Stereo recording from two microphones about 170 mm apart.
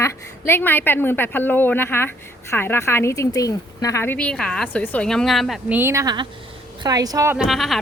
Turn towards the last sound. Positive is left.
turn(degrees=0)  # may be behind; listen again after turning